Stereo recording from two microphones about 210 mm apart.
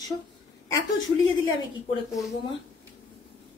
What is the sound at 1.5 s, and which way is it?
Speech, 20° left (ahead or behind).